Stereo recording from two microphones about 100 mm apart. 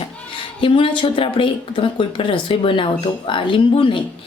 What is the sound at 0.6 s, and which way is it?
A woman's voice, 60° left (ahead or behind).